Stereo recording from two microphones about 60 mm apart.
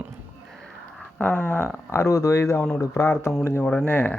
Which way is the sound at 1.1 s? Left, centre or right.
Left.